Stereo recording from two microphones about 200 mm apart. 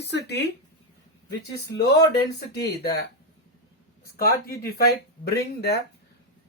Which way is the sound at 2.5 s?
55° left (ahead or behind).